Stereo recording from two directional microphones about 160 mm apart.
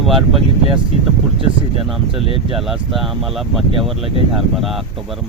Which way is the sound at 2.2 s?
35° right (ahead or behind).